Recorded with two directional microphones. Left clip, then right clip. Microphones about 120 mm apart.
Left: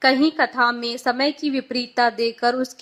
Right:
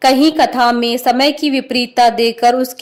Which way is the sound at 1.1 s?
45° right (ahead or behind).